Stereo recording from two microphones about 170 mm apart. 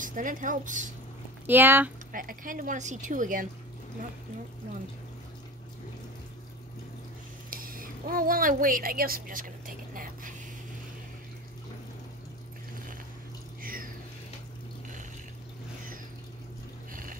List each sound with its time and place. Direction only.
0.0 s a woman's voice: 50° right (ahead or behind)
1.5 s speech: 10° right (ahead or behind)
2.1 s a woman's voice: 50° right (ahead or behind)
7.5 s a sound: 55° right (ahead or behind)
13.6 s a sound: 55° right (ahead or behind)
16.9 s music: 55° right (ahead or behind)